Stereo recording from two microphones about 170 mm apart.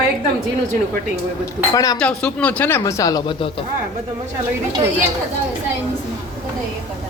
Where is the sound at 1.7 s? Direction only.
20° left (ahead or behind).